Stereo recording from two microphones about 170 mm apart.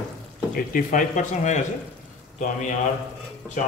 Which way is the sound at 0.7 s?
50° left (ahead or behind).